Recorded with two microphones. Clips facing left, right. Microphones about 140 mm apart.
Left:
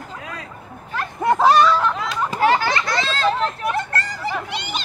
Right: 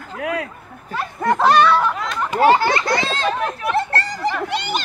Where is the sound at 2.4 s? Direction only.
25° right (ahead or behind).